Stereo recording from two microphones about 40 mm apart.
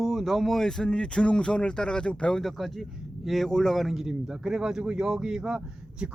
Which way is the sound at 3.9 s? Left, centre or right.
Centre.